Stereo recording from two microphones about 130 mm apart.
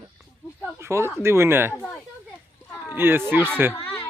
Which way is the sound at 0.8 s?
20° right (ahead or behind).